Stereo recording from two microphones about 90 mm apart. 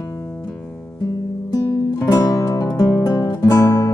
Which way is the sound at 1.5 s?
40° left (ahead or behind).